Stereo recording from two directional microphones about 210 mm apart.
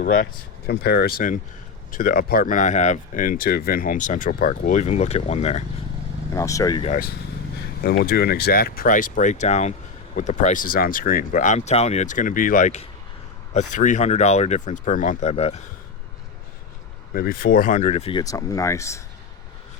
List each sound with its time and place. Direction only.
0.0 s speech: 40° left (ahead or behind)
6.3 s speech: 15° left (ahead or behind)
7.8 s speech: 45° left (ahead or behind); by 15.6 s 30° left (ahead or behind)
17.2 s speech: 45° left (ahead or behind); by 18.2 s 30° left (ahead or behind)
18.2 s speech: 15° left (ahead or behind)